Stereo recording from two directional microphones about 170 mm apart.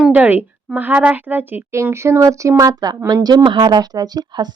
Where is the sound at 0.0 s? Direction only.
10° right (ahead or behind).